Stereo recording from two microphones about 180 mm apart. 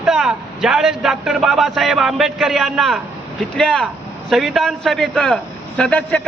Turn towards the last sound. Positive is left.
turn(degrees=5)  # may be behind; listen again after turning